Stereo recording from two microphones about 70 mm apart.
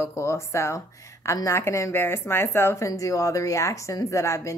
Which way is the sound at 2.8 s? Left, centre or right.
Left.